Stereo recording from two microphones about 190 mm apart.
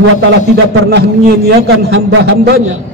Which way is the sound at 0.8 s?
55° right (ahead or behind).